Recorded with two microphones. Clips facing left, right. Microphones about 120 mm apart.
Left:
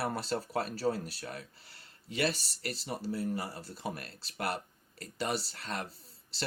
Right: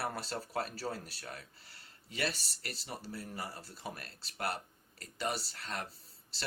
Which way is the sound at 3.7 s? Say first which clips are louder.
Left 5 dB; 50° left (ahead or behind).